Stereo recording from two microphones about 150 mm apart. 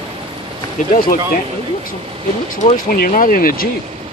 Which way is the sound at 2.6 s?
70° left (ahead or behind).